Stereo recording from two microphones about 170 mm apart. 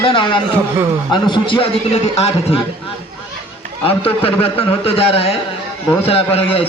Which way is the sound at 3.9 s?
35° left (ahead or behind).